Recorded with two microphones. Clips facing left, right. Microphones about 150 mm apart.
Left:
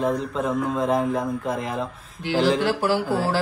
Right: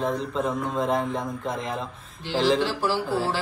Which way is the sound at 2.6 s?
50° left (ahead or behind).